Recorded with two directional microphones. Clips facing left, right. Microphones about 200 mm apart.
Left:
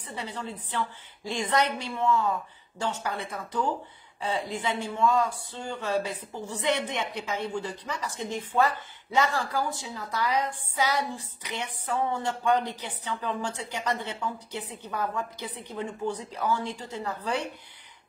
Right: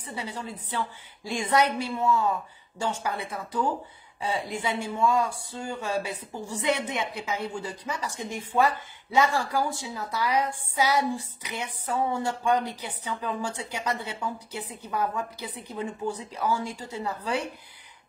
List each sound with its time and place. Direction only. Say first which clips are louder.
0.0 s a woman's voice: right 1 dB; 10° right (ahead or behind)